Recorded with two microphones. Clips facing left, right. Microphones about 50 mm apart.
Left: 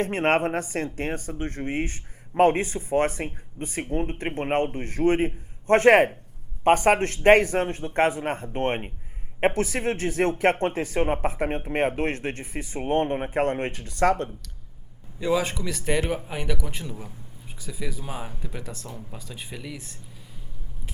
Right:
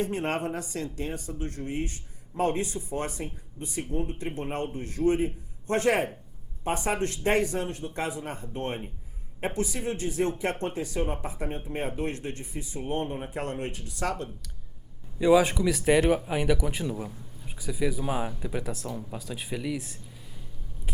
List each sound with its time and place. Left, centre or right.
0.0 s a man's voice: left
15.2 s speech: centre